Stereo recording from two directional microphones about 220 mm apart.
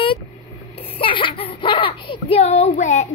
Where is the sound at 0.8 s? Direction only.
25° left (ahead or behind).